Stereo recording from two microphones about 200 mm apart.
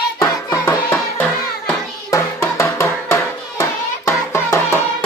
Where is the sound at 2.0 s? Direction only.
15° left (ahead or behind).